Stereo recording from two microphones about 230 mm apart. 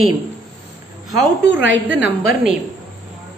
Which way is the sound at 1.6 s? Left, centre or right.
Right.